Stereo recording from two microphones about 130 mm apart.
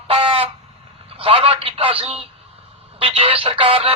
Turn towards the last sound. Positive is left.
turn(degrees=-45)  # may be behind; listen again after turning